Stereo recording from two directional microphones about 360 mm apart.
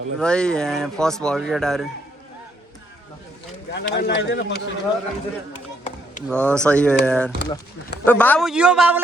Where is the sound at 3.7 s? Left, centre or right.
Left.